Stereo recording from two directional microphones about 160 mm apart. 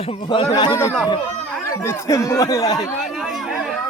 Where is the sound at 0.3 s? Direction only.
30° left (ahead or behind).